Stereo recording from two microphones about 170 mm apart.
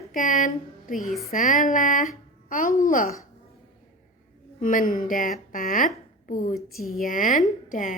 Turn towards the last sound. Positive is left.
turn(degrees=50)  # may be behind; listen again after turning